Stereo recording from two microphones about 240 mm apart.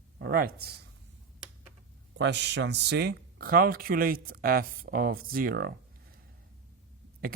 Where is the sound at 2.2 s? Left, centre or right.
Right.